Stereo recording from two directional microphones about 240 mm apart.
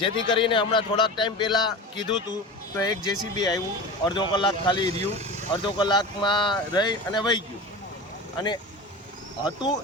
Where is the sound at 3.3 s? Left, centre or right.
Centre.